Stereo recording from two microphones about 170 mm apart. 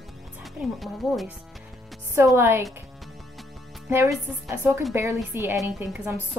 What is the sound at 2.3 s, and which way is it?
Speech, 15° right (ahead or behind).